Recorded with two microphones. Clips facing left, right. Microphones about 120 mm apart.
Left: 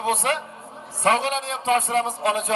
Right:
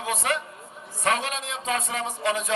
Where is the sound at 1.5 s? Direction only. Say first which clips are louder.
Left 8 dB; 60° left (ahead or behind).